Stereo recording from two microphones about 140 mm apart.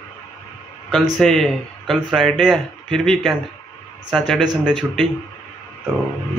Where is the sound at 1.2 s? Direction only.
5° left (ahead or behind).